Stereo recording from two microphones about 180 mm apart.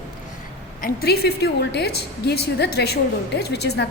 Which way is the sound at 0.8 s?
60° left (ahead or behind).